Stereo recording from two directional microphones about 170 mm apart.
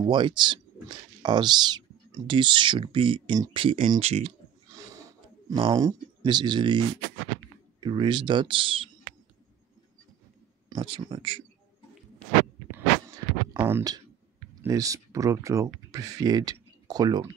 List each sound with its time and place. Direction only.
0.0 s speech: 25° right (ahead or behind)
3.6 s speech: 40° right (ahead or behind)
4.6 s a sound: 20° right (ahead or behind)
5.7 s speech: 20° right (ahead or behind)
7.8 s speech: 25° right (ahead or behind)
10.7 s speech: 25° right (ahead or behind)
12.7 s a sound: 20° right (ahead or behind)
13.7 s speech: 20° right (ahead or behind)